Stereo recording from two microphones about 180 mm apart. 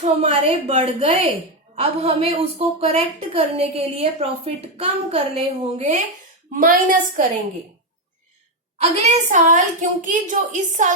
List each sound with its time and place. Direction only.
0.0 s a woman's voice: 35° right (ahead or behind)
6.5 s a woman's voice: 50° right (ahead or behind)
8.8 s a woman's voice: 35° right (ahead or behind)